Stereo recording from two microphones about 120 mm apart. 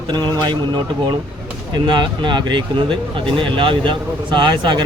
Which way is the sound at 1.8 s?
40° right (ahead or behind).